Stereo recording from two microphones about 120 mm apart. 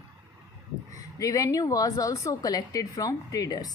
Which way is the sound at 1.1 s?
30° left (ahead or behind).